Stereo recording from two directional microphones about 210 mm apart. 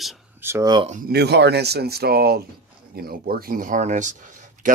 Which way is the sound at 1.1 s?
50° right (ahead or behind).